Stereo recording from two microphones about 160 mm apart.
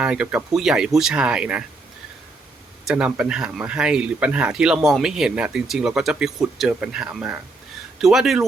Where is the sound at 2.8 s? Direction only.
5° right (ahead or behind).